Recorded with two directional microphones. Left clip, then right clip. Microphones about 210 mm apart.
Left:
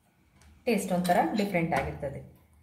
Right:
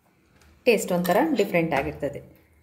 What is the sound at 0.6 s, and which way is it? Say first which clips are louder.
A woman's voice: right 6 dB; 45° right (ahead or behind).